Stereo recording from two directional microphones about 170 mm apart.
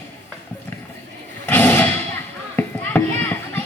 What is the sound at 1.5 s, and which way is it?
Thump, 10° left (ahead or behind).